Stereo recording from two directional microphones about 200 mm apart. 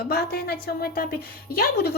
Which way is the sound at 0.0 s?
50° left (ahead or behind).